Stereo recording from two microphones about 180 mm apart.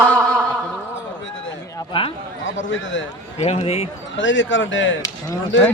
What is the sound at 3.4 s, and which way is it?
Speech, 35° left (ahead or behind).